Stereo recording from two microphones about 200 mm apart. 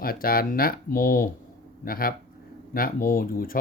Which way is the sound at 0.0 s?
45° left (ahead or behind).